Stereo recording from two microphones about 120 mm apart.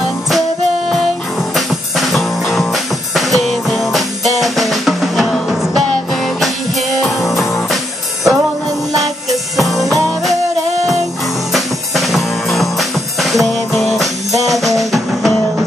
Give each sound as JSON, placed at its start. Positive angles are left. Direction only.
{"t": 0.3, "sound": "music", "side_deg": 0}
{"t": 11.5, "sound": "music", "side_deg": 0}
{"t": 14.4, "sound": "drum kit", "side_deg": 0}
{"t": 14.8, "sound": "music", "side_deg": 0}